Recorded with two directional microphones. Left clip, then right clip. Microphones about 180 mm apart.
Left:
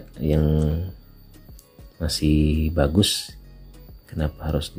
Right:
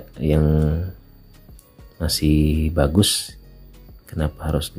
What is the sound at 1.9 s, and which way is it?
Speech, 10° right (ahead or behind).